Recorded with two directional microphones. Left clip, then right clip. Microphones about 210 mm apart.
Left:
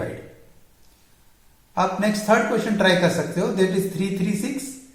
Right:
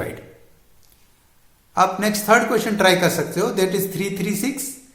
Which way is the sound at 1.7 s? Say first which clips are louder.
Right 4 dB; 45° right (ahead or behind).